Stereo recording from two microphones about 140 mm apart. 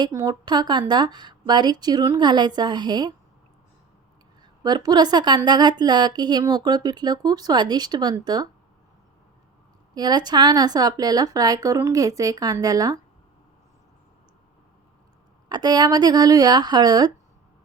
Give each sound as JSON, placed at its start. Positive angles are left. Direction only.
{"t": 0.0, "sound": "a woman's voice", "side_deg": -25}
{"t": 4.6, "sound": "speech", "side_deg": -30}
{"t": 9.9, "sound": "speech", "side_deg": -30}
{"t": 15.4, "sound": "speech", "side_deg": -30}